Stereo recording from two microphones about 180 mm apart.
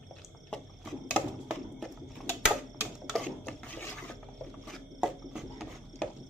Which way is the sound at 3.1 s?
5° left (ahead or behind).